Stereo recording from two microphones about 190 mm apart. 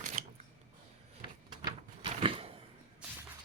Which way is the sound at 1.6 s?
30° right (ahead or behind).